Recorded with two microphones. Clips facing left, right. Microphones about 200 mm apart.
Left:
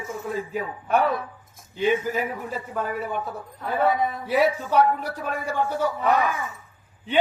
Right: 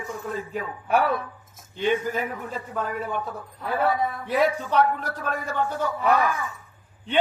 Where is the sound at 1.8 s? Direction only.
5° left (ahead or behind).